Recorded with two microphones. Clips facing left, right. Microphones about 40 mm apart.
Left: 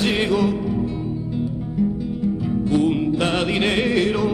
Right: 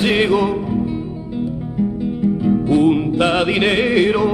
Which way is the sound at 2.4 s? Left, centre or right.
Centre.